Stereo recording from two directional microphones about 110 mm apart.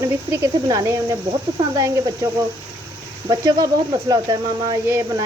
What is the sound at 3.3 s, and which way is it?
Speech, 35° right (ahead or behind).